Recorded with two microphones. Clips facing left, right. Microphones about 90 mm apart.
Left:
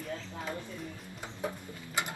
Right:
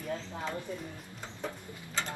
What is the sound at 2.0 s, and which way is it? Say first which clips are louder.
Mechanisms: left 1 dB; 15° left (ahead or behind).